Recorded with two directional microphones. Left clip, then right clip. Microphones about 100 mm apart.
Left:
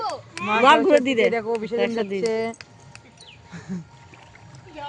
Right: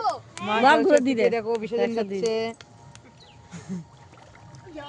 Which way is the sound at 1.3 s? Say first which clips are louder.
Left 1 dB; 35° left (ahead or behind).